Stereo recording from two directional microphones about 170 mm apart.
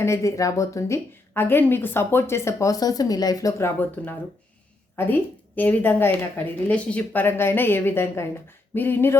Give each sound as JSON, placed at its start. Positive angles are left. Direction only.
{"t": 0.0, "sound": "a woman's voice", "side_deg": 15}